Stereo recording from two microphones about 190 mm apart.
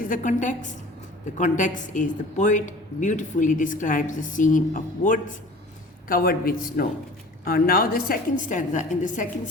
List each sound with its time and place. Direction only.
0.0 s a woman's voice: 45° left (ahead or behind)